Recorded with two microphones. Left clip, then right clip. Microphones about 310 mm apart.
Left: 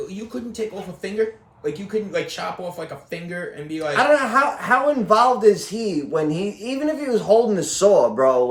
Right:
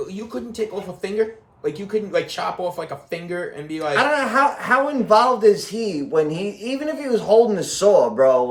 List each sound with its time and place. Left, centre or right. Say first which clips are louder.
1.0 s speech: even; centre
3.7 s speech: even; centre
3.9 s a man's voice: left 1 dB; centre